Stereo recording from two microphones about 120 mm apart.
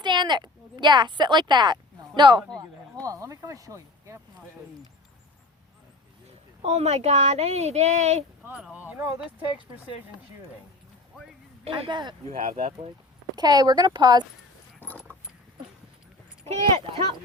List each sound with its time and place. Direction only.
0.0 s speech: 40° right (ahead or behind)
6.6 s speech: 60° right (ahead or behind)
8.5 s speech: 10° right (ahead or behind)
11.7 s speech: 40° right (ahead or behind)
12.3 s speech: 60° right (ahead or behind)
13.3 s speech: 35° right (ahead or behind)
14.8 s a sound: 15° left (ahead or behind)
16.5 s speech: 65° right (ahead or behind)